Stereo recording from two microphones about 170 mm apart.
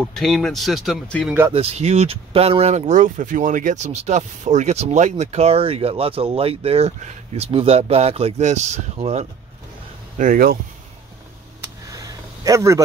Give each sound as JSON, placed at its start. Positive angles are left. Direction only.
{"t": 0.0, "sound": "speech", "side_deg": 0}
{"t": 1.5, "sound": "speech", "side_deg": -35}
{"t": 10.1, "sound": "speech", "side_deg": -50}
{"t": 11.6, "sound": "a sound", "side_deg": -20}